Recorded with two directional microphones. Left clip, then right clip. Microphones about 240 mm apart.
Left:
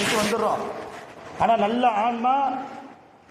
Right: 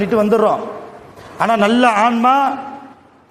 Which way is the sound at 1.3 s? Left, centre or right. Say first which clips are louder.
Right 6 dB; right.